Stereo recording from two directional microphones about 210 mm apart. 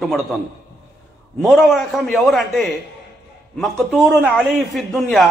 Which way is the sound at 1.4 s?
Centre (ahead or behind).